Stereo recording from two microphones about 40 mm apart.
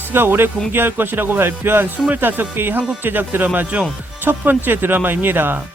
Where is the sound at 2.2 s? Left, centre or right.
Right.